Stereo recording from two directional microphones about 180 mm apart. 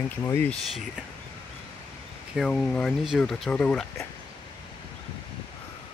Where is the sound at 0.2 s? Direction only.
15° left (ahead or behind).